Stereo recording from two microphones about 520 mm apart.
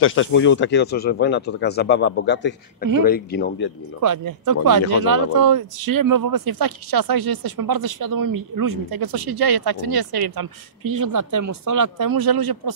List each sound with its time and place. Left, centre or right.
0.0 s speech: left
4.0 s speech: right